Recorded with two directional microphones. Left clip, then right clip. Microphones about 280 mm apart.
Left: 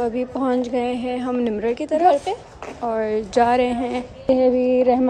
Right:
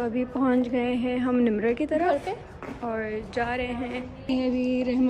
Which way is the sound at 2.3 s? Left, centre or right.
Left.